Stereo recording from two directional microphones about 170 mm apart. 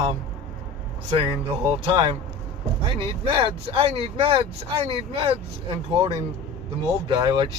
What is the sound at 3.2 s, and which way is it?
Speech, 35° right (ahead or behind).